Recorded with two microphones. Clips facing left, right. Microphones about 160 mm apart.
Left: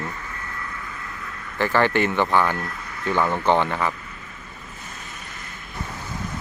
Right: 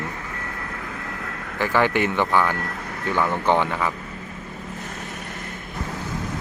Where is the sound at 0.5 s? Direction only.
65° right (ahead or behind).